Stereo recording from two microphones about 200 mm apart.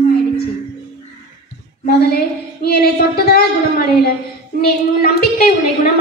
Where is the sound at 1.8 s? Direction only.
50° left (ahead or behind).